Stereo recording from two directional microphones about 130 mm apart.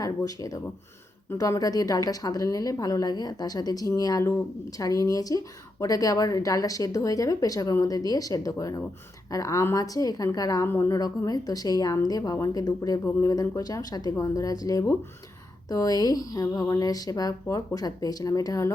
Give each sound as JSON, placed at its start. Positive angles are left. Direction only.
{"t": 0.0, "sound": "a woman's voice", "side_deg": 25}